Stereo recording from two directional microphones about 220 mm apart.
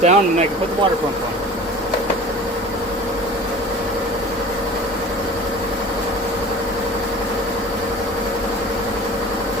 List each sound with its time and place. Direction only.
0.0 s speech: 30° right (ahead or behind)